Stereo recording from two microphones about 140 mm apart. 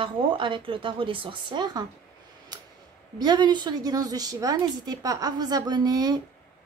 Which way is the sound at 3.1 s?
30° right (ahead or behind).